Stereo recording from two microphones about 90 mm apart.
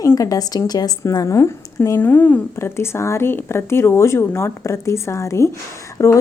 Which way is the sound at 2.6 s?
30° left (ahead or behind).